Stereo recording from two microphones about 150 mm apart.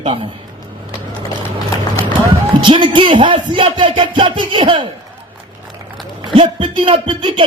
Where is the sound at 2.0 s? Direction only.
30° right (ahead or behind).